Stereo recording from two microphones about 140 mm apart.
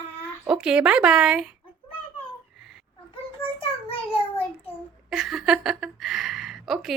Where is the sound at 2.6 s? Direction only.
Centre (ahead or behind).